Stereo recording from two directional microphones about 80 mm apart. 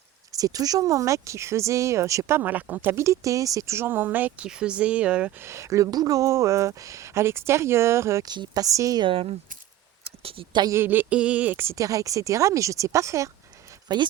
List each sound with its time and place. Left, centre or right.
0.3 s speech: right
2.4 s speech: right
3.8 s speech: right
4.4 s speech: centre
5.4 s speech: right
8.2 s speech: right
8.6 s a woman's voice: right
10.7 s speech: right
11.6 s speech: right
13.8 s speech: right